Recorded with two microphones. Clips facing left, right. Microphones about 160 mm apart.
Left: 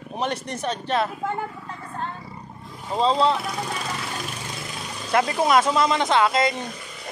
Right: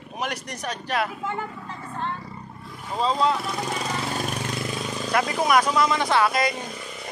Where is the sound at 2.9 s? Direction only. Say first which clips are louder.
Left 3 dB; 30° left (ahead or behind).